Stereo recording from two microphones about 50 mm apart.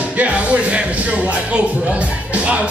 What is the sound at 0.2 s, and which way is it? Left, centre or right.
Music, right.